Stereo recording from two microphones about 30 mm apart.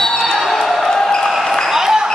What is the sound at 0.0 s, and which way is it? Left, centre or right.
Basketball bounce, centre.